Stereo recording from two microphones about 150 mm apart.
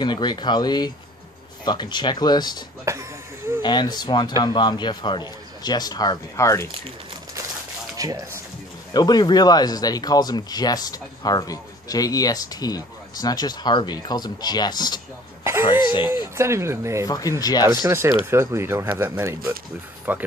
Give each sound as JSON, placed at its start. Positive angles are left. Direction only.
{"t": 0.0, "sound": "speech", "side_deg": 30}
{"t": 2.8, "sound": "speech", "side_deg": -20}
{"t": 3.6, "sound": "speech", "side_deg": 30}
{"t": 8.0, "sound": "speech", "side_deg": -25}
{"t": 8.9, "sound": "speech", "side_deg": 30}
{"t": 16.3, "sound": "speech", "side_deg": -20}
{"t": 17.1, "sound": "speech", "side_deg": 25}
{"t": 17.8, "sound": "speech", "side_deg": -20}